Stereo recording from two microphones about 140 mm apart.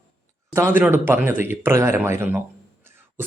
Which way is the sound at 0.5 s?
15° right (ahead or behind).